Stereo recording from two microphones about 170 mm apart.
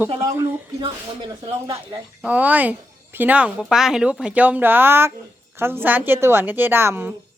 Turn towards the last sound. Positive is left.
turn(degrees=-15)  # may be behind; listen again after turning